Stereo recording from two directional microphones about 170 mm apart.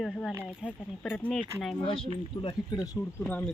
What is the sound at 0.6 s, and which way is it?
Speech, 5° left (ahead or behind).